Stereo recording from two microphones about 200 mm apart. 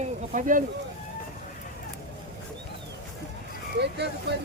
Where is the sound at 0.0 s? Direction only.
40° right (ahead or behind).